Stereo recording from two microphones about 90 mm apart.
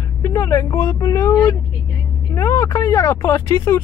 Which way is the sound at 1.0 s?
40° left (ahead or behind).